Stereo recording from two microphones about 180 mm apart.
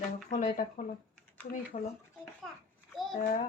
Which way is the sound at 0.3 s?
45° left (ahead or behind).